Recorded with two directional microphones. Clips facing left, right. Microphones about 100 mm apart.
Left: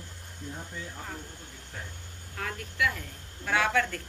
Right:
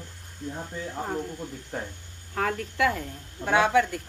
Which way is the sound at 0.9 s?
40° right (ahead or behind).